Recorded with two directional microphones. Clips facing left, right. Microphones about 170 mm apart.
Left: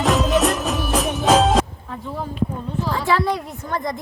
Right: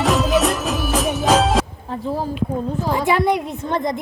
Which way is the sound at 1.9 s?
35° right (ahead or behind).